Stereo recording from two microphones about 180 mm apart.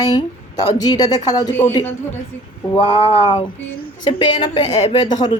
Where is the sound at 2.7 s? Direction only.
30° left (ahead or behind).